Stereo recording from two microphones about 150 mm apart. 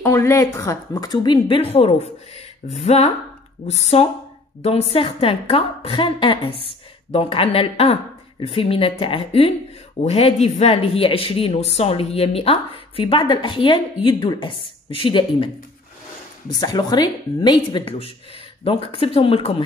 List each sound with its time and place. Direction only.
0.0 s speech: 20° left (ahead or behind); by 15.5 s 35° left (ahead or behind)
16.5 s speech: 25° left (ahead or behind)